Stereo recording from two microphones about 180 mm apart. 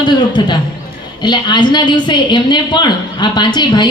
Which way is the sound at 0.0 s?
25° left (ahead or behind).